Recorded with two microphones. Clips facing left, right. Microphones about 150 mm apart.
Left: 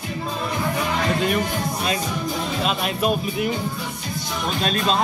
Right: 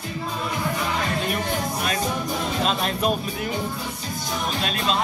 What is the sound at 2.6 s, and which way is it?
Speech, 10° left (ahead or behind).